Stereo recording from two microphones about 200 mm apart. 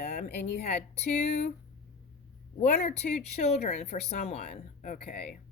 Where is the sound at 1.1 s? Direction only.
35° left (ahead or behind).